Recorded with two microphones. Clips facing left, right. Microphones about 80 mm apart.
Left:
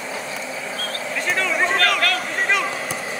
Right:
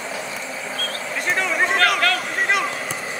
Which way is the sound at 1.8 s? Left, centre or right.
Right.